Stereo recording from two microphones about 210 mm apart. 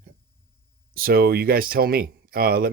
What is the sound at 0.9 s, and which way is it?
Speech, 45° right (ahead or behind).